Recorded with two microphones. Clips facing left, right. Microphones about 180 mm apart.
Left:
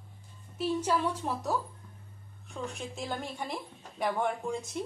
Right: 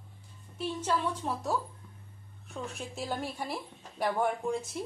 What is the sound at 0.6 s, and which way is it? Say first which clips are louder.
Speech: left 2 dB; 10° left (ahead or behind).